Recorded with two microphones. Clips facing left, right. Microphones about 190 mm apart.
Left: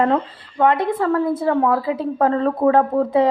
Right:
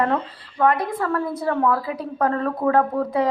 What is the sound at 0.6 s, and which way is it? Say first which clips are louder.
A woman's voice: left 3 dB; 25° left (ahead or behind).